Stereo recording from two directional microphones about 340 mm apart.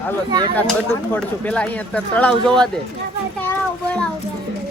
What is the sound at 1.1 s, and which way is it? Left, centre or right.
Speech, centre.